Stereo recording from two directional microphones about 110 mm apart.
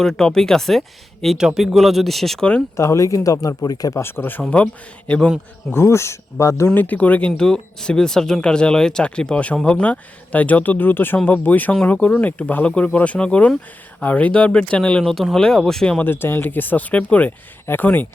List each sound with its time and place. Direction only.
0.0 s speech: 5° left (ahead or behind)
2.7 s speech: 25° left (ahead or behind); by 5.3 s 10° left (ahead or behind)
5.7 s speech: 25° left (ahead or behind)
6.7 s speech: 15° left (ahead or behind)